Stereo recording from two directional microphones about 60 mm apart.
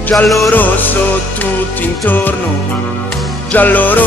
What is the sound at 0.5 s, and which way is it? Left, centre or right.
Music, left.